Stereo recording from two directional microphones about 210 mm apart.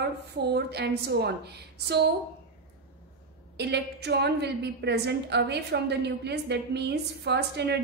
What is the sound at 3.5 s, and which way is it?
A woman's voice, 55° right (ahead or behind).